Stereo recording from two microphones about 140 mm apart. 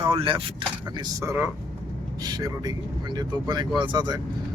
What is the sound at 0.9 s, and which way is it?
Speech, 25° right (ahead or behind).